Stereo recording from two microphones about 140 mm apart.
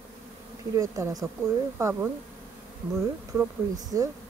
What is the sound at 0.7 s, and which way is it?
Speech, 25° right (ahead or behind).